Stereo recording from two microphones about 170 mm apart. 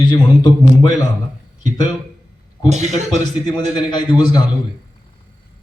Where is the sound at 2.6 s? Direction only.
40° right (ahead or behind).